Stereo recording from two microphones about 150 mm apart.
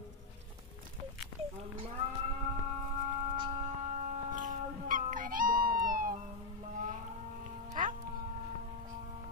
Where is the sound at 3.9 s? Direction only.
60° right (ahead or behind).